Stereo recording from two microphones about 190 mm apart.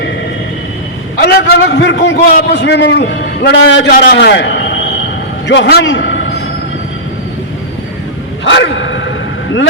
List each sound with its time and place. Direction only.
1.3 s a sound: 70° left (ahead or behind)
2.5 s a man's voice: 65° left (ahead or behind)
8.4 s a man's voice: 70° left (ahead or behind)